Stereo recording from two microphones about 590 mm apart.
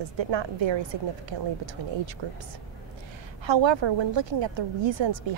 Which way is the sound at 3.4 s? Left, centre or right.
Right.